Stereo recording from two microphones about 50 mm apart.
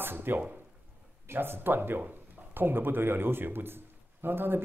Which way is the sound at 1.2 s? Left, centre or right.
Right.